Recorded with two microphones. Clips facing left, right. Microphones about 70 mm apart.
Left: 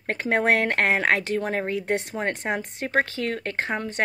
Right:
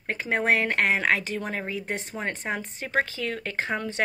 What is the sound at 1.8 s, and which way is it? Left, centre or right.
Speech, left.